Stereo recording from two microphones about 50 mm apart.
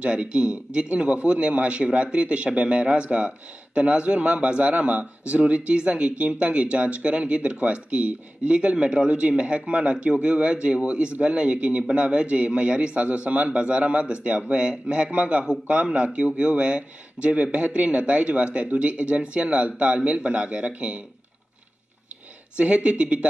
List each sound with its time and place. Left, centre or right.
0.0 s a man's voice: right
22.6 s a man's voice: right